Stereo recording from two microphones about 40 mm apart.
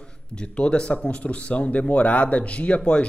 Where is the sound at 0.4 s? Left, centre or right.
Left.